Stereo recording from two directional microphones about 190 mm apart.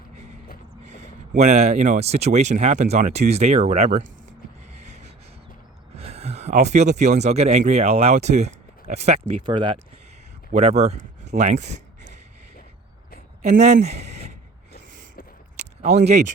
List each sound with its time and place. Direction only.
0.9 s speech: 40° right (ahead or behind)
6.0 s speech: 30° right (ahead or behind)
13.4 s speech: 35° right (ahead or behind)
15.9 s speech: 35° right (ahead or behind)